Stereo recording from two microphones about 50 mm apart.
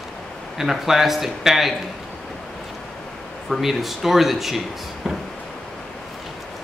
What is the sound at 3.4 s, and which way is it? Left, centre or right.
Speech, centre.